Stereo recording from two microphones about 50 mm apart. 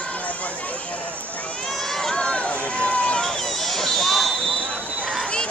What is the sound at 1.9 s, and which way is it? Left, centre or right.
Run, centre.